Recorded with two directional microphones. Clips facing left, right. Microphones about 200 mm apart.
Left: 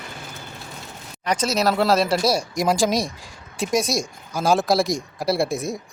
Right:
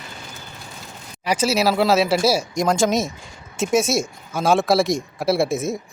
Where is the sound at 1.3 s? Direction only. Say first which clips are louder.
Right 2 dB; 10° right (ahead or behind).